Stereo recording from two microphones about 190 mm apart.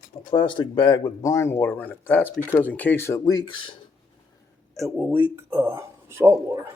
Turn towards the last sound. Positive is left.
turn(degrees=-15)  # may be behind; listen again after turning